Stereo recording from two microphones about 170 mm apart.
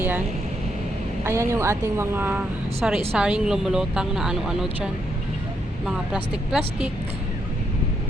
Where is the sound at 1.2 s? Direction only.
15° right (ahead or behind).